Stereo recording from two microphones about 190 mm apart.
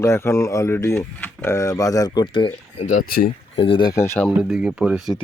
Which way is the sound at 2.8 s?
45° left (ahead or behind).